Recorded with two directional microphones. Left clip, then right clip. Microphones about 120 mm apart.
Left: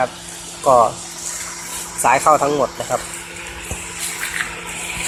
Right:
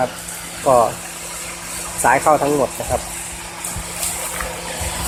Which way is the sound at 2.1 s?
Centre (ahead or behind).